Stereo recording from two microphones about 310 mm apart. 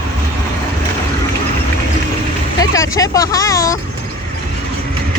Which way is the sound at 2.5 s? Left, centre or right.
Centre.